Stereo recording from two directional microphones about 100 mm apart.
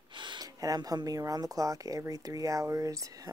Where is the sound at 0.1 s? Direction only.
50° right (ahead or behind).